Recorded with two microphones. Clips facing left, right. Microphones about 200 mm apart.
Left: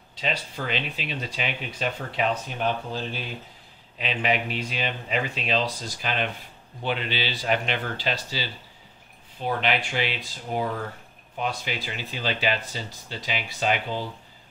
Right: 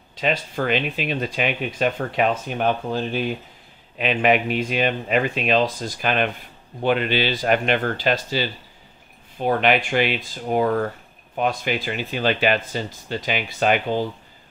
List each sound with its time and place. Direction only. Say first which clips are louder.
0.2 s speech: right 7 dB; 55° right (ahead or behind)